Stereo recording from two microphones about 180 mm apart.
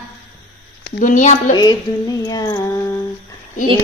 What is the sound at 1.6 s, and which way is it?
Music, 20° left (ahead or behind).